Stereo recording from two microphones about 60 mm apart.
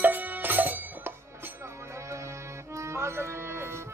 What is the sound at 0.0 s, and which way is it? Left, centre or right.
Music, right.